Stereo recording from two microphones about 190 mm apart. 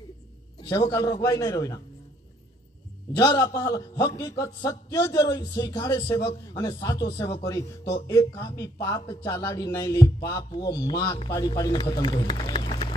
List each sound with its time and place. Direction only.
0.6 s a man's voice: 20° left (ahead or behind)
3.2 s a man's voice: 20° left (ahead or behind)